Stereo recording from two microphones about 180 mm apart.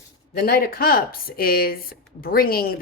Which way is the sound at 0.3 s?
55° left (ahead or behind).